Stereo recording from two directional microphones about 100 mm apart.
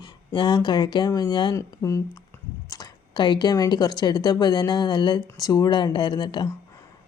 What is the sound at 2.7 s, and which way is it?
Speech, 45° left (ahead or behind).